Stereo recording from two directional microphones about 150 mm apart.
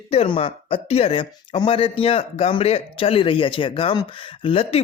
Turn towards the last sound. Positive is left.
turn(degrees=40)  # may be behind; listen again after turning